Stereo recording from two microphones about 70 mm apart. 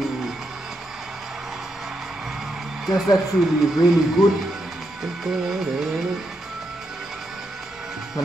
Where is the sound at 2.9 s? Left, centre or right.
Centre.